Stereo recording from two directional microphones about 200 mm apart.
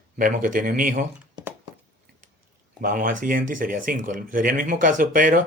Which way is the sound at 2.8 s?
40° right (ahead or behind).